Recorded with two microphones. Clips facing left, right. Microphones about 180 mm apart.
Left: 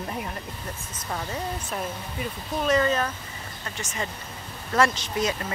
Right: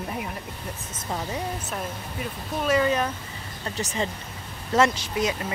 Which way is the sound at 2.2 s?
5° right (ahead or behind).